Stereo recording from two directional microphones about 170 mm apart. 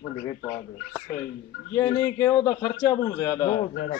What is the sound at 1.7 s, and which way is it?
A man's voice, 15° left (ahead or behind).